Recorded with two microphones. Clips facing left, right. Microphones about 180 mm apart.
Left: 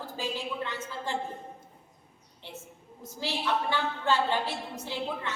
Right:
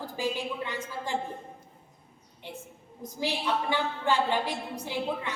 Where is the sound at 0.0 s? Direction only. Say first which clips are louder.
Right 3 dB; 15° right (ahead or behind).